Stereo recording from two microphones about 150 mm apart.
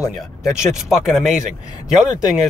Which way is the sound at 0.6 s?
Centre (ahead or behind).